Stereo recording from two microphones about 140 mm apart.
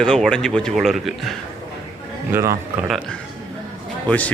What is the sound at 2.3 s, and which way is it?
Speech, 20° right (ahead or behind).